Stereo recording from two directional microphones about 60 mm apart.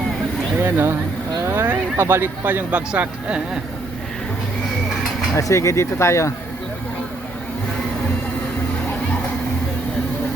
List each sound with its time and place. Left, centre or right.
0.6 s a man's voice: right; by 3.6 s centre
5.4 s speech: left